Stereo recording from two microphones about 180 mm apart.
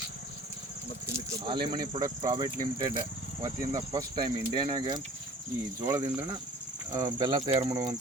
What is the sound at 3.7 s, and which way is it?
Speech, 20° right (ahead or behind).